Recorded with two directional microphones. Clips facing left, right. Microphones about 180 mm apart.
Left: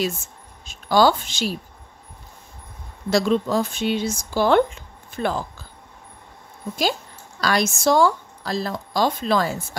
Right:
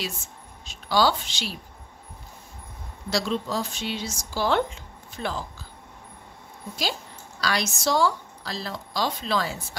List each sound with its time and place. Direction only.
0.7 s a woman's voice: 50° left (ahead or behind)
3.1 s speech: 50° left (ahead or behind)
6.8 s a woman's voice: 50° left (ahead or behind)